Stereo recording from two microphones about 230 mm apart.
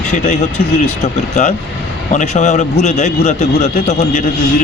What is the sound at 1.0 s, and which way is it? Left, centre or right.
A man's voice, left.